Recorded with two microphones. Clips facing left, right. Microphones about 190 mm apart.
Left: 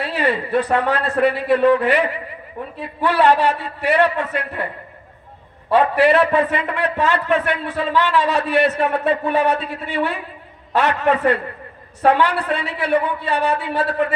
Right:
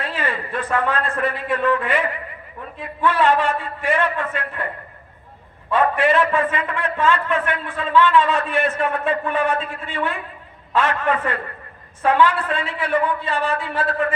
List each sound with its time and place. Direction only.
0.0 s a sound: 70° left (ahead or behind)
0.8 s a man's voice: 75° left (ahead or behind)
5.7 s a man's voice: 70° left (ahead or behind)